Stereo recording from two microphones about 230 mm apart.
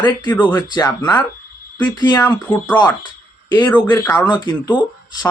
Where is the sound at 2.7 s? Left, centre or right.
Centre.